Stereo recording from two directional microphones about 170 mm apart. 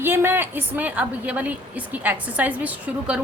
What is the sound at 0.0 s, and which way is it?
Speech, 15° right (ahead or behind).